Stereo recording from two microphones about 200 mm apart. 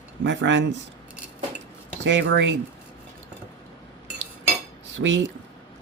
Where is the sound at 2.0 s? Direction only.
65° right (ahead or behind).